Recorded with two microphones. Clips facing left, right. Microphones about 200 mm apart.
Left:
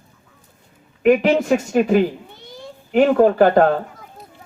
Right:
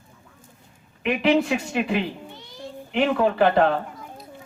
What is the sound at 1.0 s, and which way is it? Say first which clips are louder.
Speech: left 5 dB; 45° left (ahead or behind).